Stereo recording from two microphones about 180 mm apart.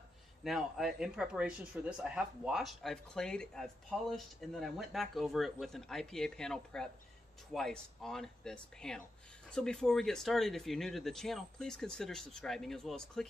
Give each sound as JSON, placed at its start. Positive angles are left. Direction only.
{"t": 0.4, "sound": "speech", "side_deg": 0}